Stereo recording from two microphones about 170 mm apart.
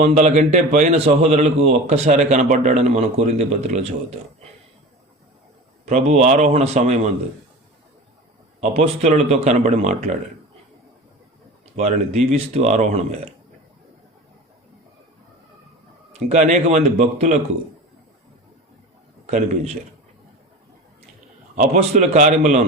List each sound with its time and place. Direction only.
0.0 s a man's voice: 40° right (ahead or behind)
5.8 s a man's voice: 40° right (ahead or behind)
8.7 s a man's voice: 40° right (ahead or behind)
11.8 s a man's voice: 40° right (ahead or behind)
16.3 s a man's voice: 40° right (ahead or behind)
21.5 s a man's voice: 45° right (ahead or behind)